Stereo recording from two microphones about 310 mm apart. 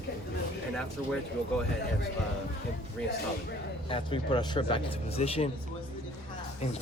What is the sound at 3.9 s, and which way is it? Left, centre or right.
Speech, centre.